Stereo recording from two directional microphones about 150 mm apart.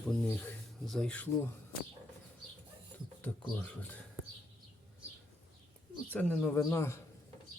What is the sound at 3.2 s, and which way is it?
Speech, 10° left (ahead or behind).